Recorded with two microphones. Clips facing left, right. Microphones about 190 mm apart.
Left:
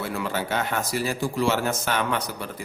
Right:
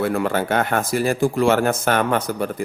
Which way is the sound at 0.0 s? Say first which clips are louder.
Right 8 dB; 55° right (ahead or behind).